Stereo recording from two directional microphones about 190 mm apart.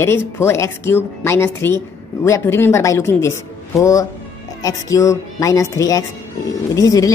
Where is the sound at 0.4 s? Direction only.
15° left (ahead or behind).